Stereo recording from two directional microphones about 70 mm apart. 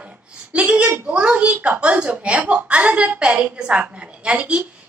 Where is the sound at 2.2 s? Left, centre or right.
Centre.